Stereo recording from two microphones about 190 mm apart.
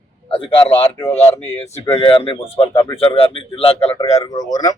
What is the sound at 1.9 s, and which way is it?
Speech, 30° left (ahead or behind).